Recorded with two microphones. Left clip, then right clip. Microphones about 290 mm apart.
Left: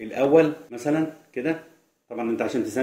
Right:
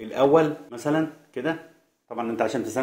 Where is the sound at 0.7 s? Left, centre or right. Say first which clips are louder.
Even; right.